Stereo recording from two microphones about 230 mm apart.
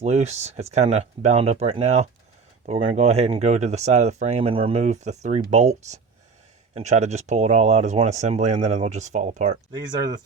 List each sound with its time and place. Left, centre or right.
0.0 s speech: right
9.7 s speech: centre